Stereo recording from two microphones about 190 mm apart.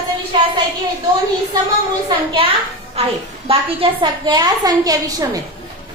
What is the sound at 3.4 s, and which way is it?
A woman's voice, 25° right (ahead or behind).